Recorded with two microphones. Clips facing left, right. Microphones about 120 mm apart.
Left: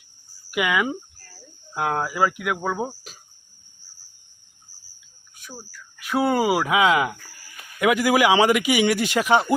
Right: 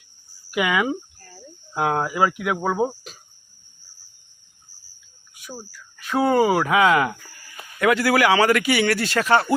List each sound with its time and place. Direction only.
0.5 s speech: centre (ahead or behind)
5.4 s cricket: 10° right (ahead or behind)
6.0 s a man's voice: 10° left (ahead or behind)